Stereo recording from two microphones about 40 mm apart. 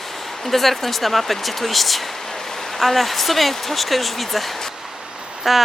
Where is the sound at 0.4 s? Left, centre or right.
Centre.